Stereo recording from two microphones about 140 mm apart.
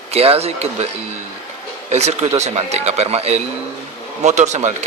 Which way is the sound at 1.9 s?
50° right (ahead or behind).